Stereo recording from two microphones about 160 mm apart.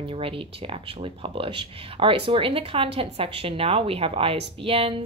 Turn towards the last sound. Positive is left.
turn(degrees=-35)  # may be behind; listen again after turning